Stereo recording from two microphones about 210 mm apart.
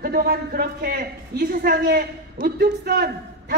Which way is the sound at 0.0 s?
45° right (ahead or behind).